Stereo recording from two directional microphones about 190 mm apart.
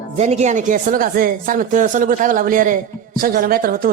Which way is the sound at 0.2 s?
35° right (ahead or behind).